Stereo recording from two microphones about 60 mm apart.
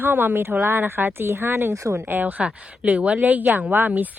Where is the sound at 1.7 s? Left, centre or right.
Right.